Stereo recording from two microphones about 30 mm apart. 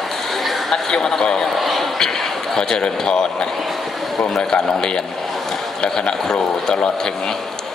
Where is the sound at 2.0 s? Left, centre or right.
Centre.